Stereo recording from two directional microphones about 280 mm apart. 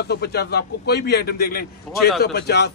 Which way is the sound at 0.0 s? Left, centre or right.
Left.